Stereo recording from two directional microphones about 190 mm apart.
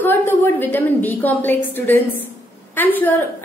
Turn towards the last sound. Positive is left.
turn(degrees=10)  # may be behind; listen again after turning